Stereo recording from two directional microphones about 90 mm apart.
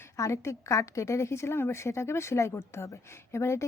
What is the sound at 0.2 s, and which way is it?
A woman's voice, 35° left (ahead or behind).